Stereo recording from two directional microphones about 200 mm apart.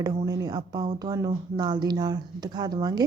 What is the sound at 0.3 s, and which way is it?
Speech, 20° right (ahead or behind).